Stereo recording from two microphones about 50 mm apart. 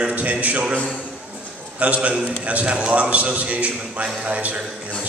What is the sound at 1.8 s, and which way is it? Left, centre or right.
A man's voice, right.